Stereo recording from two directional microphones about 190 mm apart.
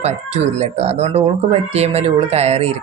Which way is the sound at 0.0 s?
35° right (ahead or behind).